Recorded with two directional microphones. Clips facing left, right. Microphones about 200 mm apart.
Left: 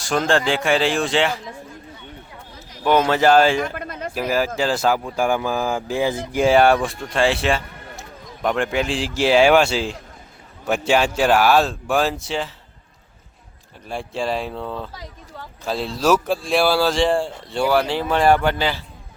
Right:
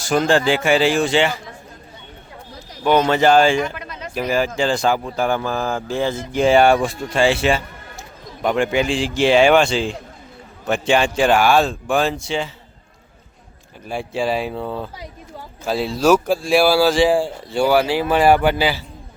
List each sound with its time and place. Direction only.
0.0 s speech: centre (ahead or behind)
2.8 s speech: centre (ahead or behind)
3.8 s a sound: 55° left (ahead or behind)
4.1 s a man's voice: 5° left (ahead or behind)
13.8 s speech: centre (ahead or behind)